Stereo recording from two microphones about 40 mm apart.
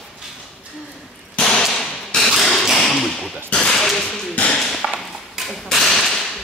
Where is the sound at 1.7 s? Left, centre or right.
Centre.